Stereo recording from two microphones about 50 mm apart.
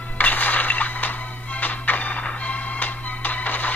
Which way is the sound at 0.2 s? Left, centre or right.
Left.